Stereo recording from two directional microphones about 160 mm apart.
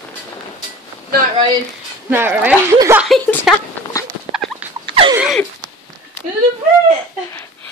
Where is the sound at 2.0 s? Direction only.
10° right (ahead or behind).